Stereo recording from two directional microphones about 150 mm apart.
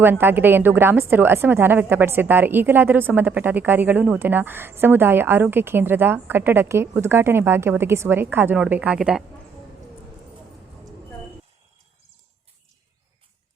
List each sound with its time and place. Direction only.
0.0 s a woman's voice: 15° right (ahead or behind)